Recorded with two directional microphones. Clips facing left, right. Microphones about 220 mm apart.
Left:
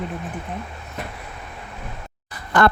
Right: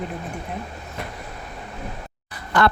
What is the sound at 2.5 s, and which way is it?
Speech, 50° left (ahead or behind).